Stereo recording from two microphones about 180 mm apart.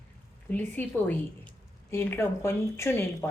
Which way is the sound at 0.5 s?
10° left (ahead or behind).